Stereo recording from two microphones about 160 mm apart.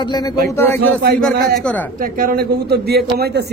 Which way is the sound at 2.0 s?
60° right (ahead or behind).